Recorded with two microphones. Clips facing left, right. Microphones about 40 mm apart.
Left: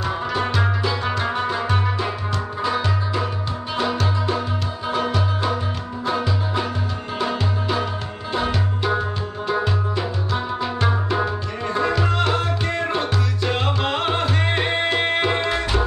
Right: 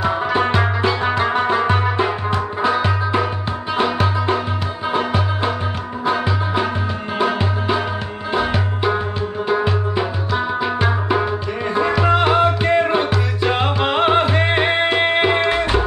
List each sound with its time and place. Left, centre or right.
0.0 s music: right